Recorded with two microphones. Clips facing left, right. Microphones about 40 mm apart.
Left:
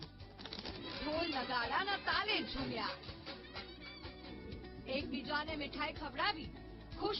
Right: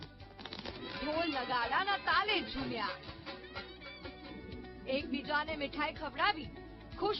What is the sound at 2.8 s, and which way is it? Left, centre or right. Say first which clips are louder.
Music: right 3 dB; centre.